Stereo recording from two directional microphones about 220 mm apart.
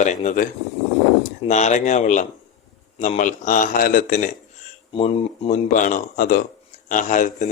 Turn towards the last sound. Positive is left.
turn(degrees=35)  # may be behind; listen again after turning